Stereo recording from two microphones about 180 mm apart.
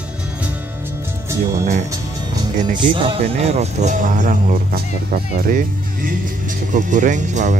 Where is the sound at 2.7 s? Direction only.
30° right (ahead or behind).